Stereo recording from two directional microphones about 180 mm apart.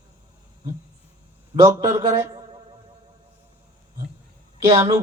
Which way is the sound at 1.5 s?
20° right (ahead or behind).